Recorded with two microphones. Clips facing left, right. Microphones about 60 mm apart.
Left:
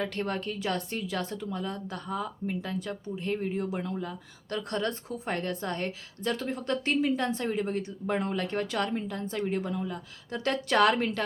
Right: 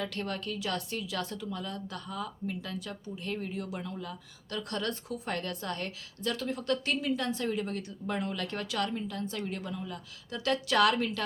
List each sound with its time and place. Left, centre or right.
0.0 s a woman's voice: left